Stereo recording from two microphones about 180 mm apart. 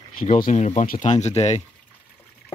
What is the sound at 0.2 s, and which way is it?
Speech, 45° left (ahead or behind).